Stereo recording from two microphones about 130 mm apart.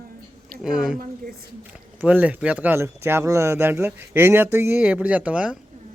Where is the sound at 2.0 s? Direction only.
10° right (ahead or behind).